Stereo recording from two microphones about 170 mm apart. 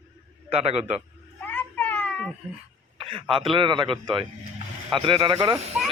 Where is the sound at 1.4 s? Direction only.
10° left (ahead or behind).